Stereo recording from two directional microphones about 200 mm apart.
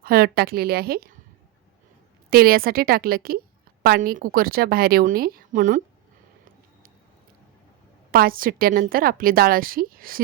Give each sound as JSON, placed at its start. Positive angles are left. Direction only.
{"t": 0.0, "sound": "a woman's voice", "side_deg": -50}
{"t": 2.3, "sound": "a woman's voice", "side_deg": -50}
{"t": 8.1, "sound": "a woman's voice", "side_deg": -45}